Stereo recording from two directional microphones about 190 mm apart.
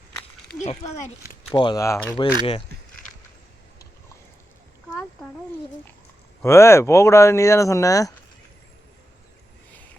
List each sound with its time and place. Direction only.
0.6 s speech: 35° left (ahead or behind)
1.5 s speech: 20° left (ahead or behind)
6.4 s speech: 15° left (ahead or behind)